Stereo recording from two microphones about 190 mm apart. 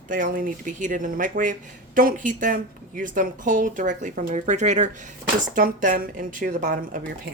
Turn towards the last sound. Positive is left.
turn(degrees=-45)  # may be behind; listen again after turning